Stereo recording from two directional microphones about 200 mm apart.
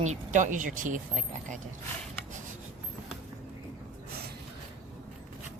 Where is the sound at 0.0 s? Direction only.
35° right (ahead or behind).